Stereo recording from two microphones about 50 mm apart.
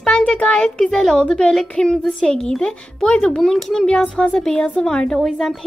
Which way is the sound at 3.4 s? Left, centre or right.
Centre.